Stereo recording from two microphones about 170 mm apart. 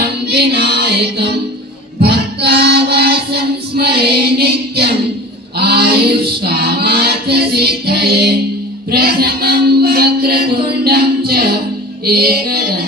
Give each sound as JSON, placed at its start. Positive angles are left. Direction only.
{"t": 0.0, "sound": "music", "side_deg": -70}
{"t": 5.5, "sound": "female singing", "side_deg": -70}
{"t": 8.9, "sound": "music", "side_deg": -65}